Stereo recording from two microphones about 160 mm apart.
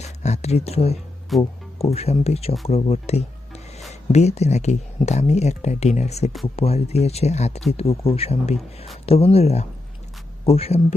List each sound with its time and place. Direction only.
0.0 s speech: 45° left (ahead or behind)